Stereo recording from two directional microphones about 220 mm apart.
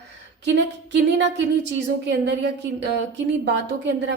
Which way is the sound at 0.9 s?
55° right (ahead or behind).